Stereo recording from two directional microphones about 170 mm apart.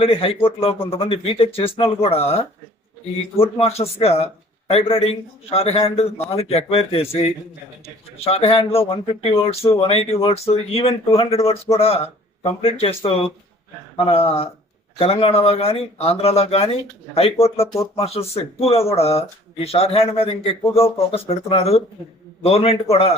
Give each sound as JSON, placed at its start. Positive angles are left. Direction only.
{"t": 0.0, "sound": "a man's voice", "side_deg": 35}
{"t": 3.4, "sound": "a man's voice", "side_deg": 35}
{"t": 17.9, "sound": "a man's voice", "side_deg": 35}